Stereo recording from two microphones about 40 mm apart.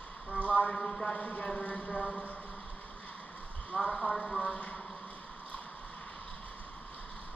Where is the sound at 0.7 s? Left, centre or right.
Centre.